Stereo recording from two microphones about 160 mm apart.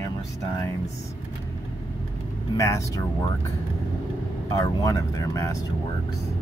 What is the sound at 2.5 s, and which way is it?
Speech, 20° left (ahead or behind).